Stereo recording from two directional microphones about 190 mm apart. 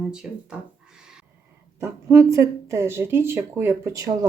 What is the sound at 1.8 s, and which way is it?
Speech, 15° right (ahead or behind).